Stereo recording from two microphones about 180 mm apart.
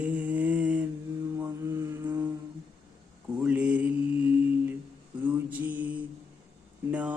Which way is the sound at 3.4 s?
5° right (ahead or behind).